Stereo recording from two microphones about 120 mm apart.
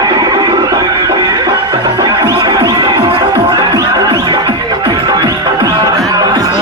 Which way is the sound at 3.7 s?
30° right (ahead or behind).